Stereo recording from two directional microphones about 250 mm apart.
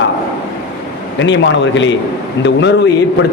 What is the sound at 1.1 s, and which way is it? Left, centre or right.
A man's voice, left.